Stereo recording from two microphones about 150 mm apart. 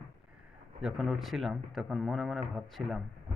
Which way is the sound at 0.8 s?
Centre (ahead or behind).